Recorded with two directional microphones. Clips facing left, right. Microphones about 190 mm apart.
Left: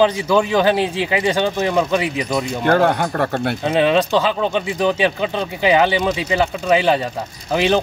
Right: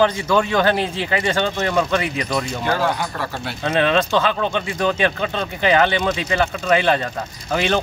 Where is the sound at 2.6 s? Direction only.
55° left (ahead or behind).